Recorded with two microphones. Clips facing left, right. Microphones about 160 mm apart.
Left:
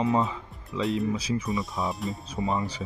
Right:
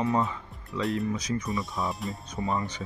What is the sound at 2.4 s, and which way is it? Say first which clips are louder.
Speech: left 2 dB; 20° left (ahead or behind).